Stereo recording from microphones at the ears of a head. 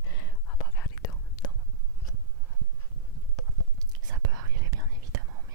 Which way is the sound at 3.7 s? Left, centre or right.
Right.